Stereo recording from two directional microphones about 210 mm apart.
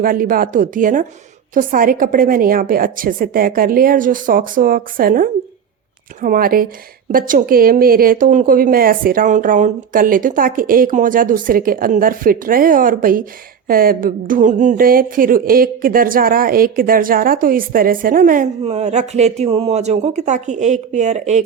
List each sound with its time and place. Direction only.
0.0 s a woman's voice: 40° right (ahead or behind)